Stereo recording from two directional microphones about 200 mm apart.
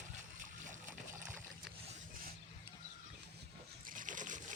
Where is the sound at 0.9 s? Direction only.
5° right (ahead or behind).